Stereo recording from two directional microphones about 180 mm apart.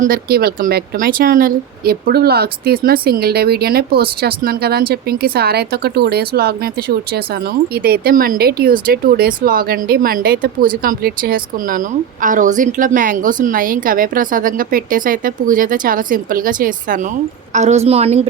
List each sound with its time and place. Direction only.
0.0 s a woman's voice: 55° right (ahead or behind); by 18.2 s 35° right (ahead or behind)